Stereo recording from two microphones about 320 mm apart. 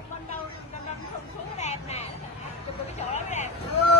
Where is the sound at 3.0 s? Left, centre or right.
Left.